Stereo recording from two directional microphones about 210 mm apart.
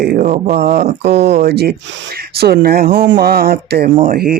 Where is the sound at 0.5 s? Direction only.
45° right (ahead or behind).